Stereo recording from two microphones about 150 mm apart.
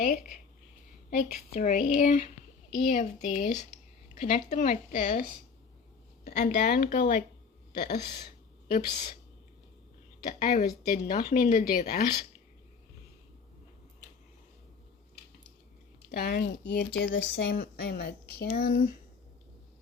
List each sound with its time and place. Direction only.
1.3 s speech: 60° left (ahead or behind)
6.4 s speech: 90° left; by 7.3 s 65° left (ahead or behind)
7.8 s speech: 90° left
8.6 s a woman's voice: 75° left (ahead or behind)
10.2 s speech: 60° left (ahead or behind)
10.9 s speech: 80° left
11.3 s speech: 65° left (ahead or behind)
16.1 s speech: 80° left
17.4 s speech: 90° left